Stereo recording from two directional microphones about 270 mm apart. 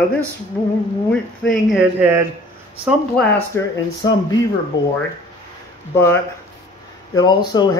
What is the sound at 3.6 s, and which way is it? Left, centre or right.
Speech, centre.